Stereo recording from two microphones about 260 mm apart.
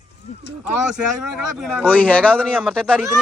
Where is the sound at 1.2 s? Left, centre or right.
Centre.